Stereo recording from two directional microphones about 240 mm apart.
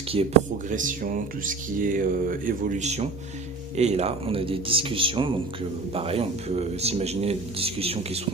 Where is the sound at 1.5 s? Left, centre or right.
Right.